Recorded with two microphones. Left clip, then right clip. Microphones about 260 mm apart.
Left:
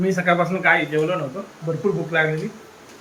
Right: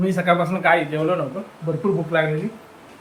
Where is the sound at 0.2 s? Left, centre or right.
Centre.